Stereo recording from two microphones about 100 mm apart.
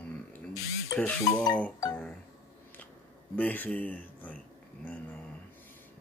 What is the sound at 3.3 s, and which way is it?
Speech, 15° left (ahead or behind).